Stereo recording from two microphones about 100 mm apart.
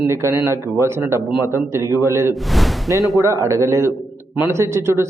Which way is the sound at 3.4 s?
30° right (ahead or behind).